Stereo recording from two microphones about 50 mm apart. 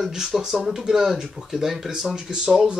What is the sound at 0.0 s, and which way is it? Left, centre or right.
Speech, centre.